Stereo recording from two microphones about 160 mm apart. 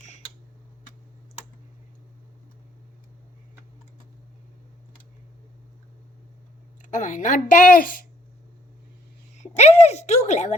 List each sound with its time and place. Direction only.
6.9 s a woman's voice: 50° left (ahead or behind)
9.4 s a woman's voice: 45° left (ahead or behind)